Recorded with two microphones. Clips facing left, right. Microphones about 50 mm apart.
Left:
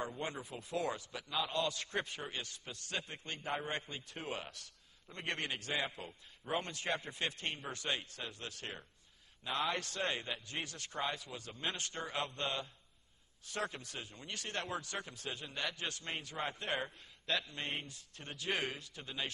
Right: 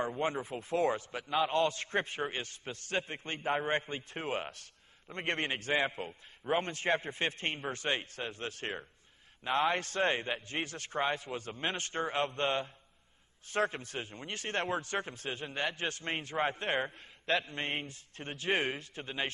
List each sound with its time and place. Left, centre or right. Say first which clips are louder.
0.0 s a man's voice: right 8 dB; right